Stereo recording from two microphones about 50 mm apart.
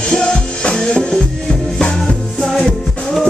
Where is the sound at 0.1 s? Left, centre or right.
Centre.